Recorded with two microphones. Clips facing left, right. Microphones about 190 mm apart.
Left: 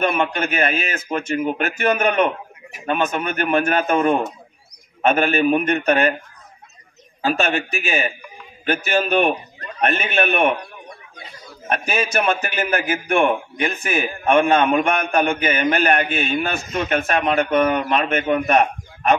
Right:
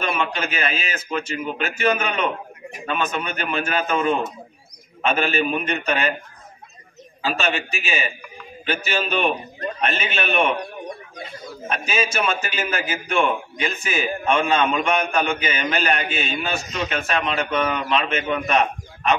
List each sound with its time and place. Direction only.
0.0 s a man's voice: 55° left (ahead or behind)
7.2 s a man's voice: 50° left (ahead or behind)
11.7 s a man's voice: 55° left (ahead or behind)